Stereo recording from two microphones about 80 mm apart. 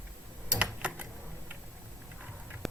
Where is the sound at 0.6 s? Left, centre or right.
Centre.